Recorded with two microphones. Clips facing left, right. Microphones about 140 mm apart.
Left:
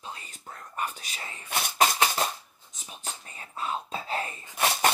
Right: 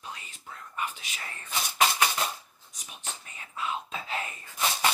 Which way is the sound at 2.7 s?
35° left (ahead or behind).